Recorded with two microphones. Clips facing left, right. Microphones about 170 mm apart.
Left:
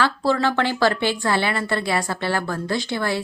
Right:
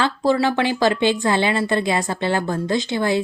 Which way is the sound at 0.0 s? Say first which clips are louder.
Right 2 dB; 15° right (ahead or behind).